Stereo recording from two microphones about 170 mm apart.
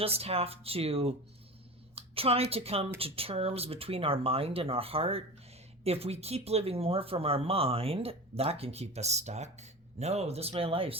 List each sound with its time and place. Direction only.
0.0 s speech: 35° right (ahead or behind)